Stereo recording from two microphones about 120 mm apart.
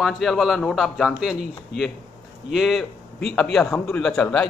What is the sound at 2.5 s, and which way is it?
A man's voice, centre (ahead or behind).